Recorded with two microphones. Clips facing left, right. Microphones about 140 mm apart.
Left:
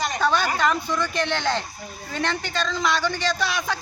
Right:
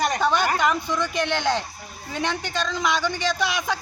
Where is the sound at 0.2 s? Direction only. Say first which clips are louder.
Right 1 dB; 20° right (ahead or behind).